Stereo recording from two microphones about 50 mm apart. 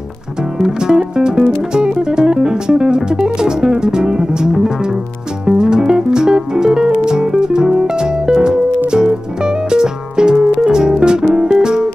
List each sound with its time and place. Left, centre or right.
0.6 s music: centre